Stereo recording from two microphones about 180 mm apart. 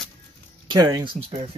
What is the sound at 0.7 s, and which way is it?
Speech, 20° right (ahead or behind).